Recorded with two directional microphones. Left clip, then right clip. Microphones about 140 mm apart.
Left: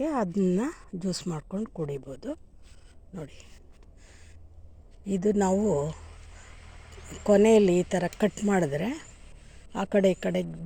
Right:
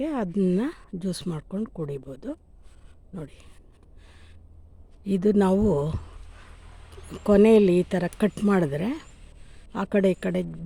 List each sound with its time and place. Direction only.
0.0 s speech: 25° right (ahead or behind)
5.0 s speech: 40° right (ahead or behind)
7.3 s speech: 35° right (ahead or behind)
8.4 s speech: 45° right (ahead or behind)